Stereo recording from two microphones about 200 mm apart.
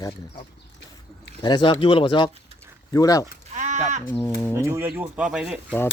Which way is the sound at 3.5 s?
35° right (ahead or behind).